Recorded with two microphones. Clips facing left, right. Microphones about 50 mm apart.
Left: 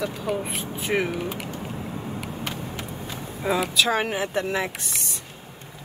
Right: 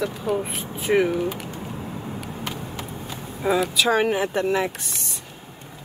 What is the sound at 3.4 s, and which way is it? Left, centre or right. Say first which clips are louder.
Speech: right 2 dB; centre.